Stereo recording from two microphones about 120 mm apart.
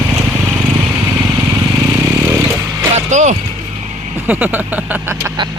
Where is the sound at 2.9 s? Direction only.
85° right.